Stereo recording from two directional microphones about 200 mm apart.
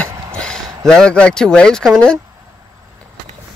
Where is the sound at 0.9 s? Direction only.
5° left (ahead or behind).